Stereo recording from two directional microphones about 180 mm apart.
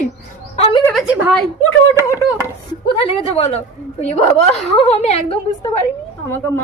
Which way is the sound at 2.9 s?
30° left (ahead or behind).